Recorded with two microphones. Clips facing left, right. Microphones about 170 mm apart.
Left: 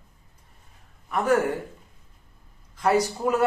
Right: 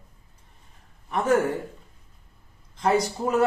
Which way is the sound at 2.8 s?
25° right (ahead or behind).